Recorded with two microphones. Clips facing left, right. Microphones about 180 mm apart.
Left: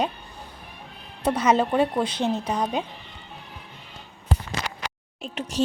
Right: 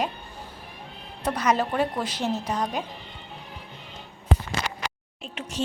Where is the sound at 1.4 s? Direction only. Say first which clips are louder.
Left 3 dB; 25° left (ahead or behind).